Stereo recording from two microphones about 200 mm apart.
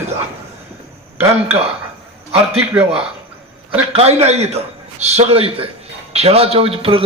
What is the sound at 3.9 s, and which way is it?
A man's voice, 30° right (ahead or behind).